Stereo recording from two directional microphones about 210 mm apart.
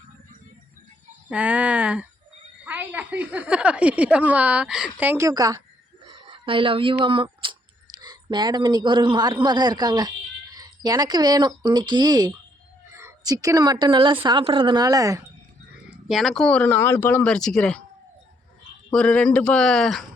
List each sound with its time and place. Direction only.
1.3 s a woman's voice: 5° right (ahead or behind)
16.0 s speech: centre (ahead or behind)
18.9 s speech: 5° left (ahead or behind)